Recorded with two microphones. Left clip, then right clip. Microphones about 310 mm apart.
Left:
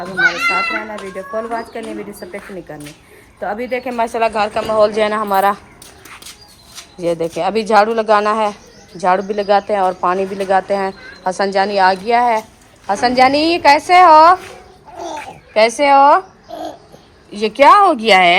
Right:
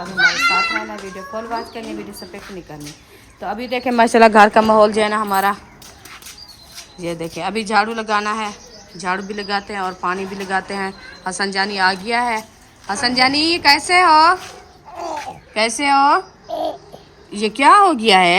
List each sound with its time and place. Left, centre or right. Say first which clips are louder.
0.2 s speech: left 1 dB; centre
1.1 s a woman's voice: left 4 dB; centre
3.4 s a woman's voice: left 3 dB; centre
3.8 s a woman's voice: right 7 dB; right
4.9 s a woman's voice: left 2 dB; centre
7.0 s speech: left 7 dB; centre
15.1 s babbling: left 7 dB; centre
17.3 s a woman's voice: left 3 dB; centre